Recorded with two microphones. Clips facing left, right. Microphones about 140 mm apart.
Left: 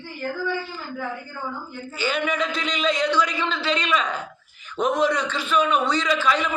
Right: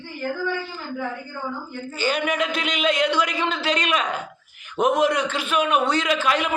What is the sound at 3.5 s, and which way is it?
Speech, 45° right (ahead or behind).